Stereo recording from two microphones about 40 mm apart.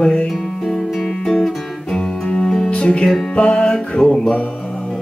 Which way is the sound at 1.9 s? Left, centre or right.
Left.